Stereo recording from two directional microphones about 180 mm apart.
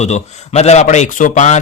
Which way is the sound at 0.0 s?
40° left (ahead or behind).